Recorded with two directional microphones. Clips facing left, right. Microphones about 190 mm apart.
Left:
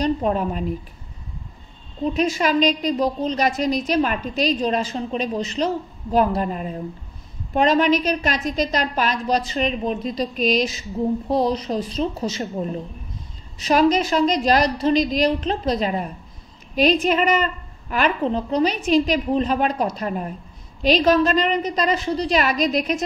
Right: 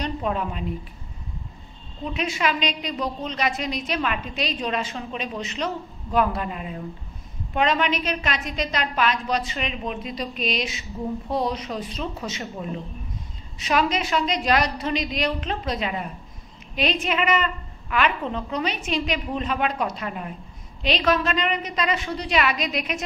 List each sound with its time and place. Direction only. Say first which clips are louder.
0.0 s a woman's voice: left 6 dB; 40° left (ahead or behind)
2.1 s a woman's voice: left 6 dB; 40° left (ahead or behind)
13.6 s a woman's voice: left 6 dB; 40° left (ahead or behind)